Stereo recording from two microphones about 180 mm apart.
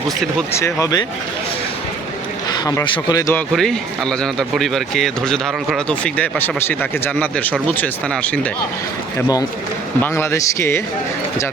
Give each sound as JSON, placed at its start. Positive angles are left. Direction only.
{"t": 0.5, "sound": "a man's voice", "side_deg": 15}
{"t": 2.6, "sound": "speech", "side_deg": 25}
{"t": 3.3, "sound": "a man's voice", "side_deg": 0}
{"t": 10.0, "sound": "a man's voice", "side_deg": 10}